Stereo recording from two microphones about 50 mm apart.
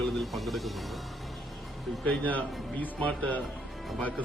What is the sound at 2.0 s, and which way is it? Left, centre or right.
Speech, left.